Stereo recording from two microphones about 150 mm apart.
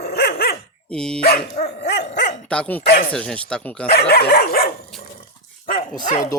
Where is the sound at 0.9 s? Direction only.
5° left (ahead or behind).